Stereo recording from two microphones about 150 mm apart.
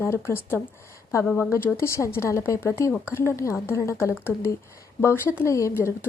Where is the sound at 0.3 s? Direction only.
15° left (ahead or behind).